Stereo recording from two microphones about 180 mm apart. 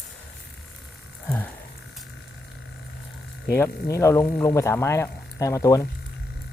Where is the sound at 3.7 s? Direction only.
60° left (ahead or behind).